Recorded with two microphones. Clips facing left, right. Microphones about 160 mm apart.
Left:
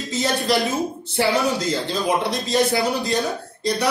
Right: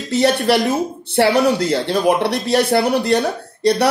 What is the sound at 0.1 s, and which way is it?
Speech, 65° right (ahead or behind).